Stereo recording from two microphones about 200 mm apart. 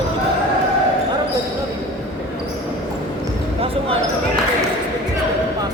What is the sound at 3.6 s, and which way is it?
Basketball bounce, 30° right (ahead or behind).